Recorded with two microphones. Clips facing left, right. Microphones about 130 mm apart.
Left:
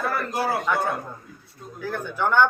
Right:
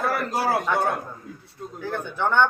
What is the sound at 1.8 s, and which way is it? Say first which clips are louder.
Speech: even; 25° right (ahead or behind).